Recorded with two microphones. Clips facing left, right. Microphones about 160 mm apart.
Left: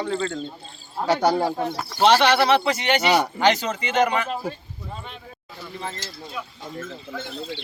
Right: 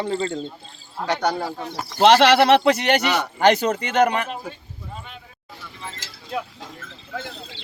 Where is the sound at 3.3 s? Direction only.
55° right (ahead or behind).